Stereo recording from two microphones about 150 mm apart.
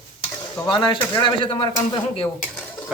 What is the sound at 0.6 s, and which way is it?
Speech, 30° left (ahead or behind).